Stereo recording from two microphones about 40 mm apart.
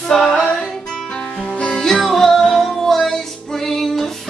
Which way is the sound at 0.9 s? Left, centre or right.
Centre.